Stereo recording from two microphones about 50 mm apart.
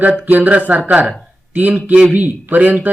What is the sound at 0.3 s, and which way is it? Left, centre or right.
Speech, right.